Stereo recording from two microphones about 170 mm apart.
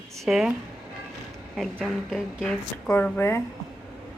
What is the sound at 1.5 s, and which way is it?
A woman's voice, centre (ahead or behind).